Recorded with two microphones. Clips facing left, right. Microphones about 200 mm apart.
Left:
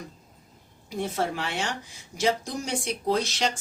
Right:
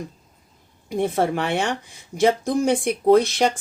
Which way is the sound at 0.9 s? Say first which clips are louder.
Right 7 dB; 55° right (ahead or behind).